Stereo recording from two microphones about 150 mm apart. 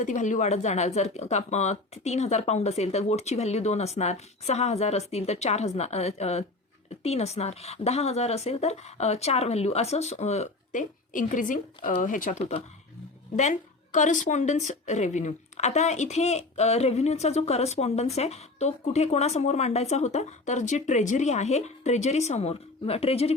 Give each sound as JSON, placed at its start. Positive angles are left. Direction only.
{"t": 0.0, "sound": "a woman's voice", "side_deg": 55}
{"t": 12.4, "sound": "a woman's voice", "side_deg": 45}